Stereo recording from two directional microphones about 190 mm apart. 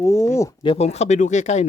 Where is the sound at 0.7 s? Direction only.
35° left (ahead or behind).